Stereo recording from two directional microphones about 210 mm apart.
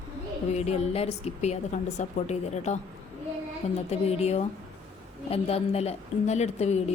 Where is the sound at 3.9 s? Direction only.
30° left (ahead or behind).